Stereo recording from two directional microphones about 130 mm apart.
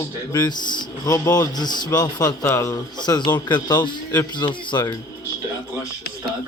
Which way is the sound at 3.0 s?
35° left (ahead or behind).